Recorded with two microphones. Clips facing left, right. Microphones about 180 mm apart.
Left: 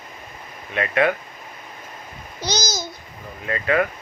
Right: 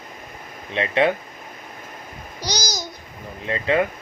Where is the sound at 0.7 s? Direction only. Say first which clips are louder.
Right 1 dB; 25° right (ahead or behind).